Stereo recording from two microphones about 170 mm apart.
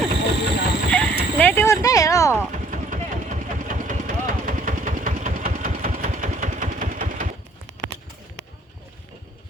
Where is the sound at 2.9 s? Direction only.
50° right (ahead or behind).